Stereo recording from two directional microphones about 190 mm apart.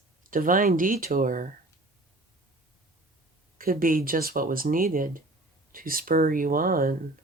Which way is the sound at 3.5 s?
50° right (ahead or behind).